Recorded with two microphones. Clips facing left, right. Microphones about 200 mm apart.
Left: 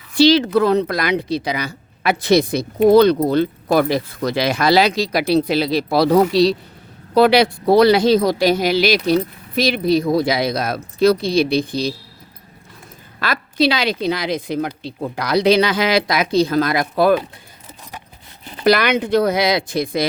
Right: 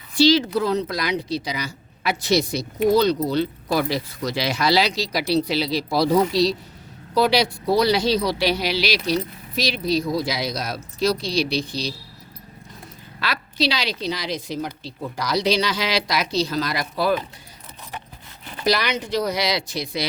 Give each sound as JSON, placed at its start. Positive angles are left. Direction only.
{"t": 0.2, "sound": "speech", "side_deg": 60}
{"t": 13.1, "sound": "speech", "side_deg": 50}
{"t": 18.6, "sound": "speech", "side_deg": 55}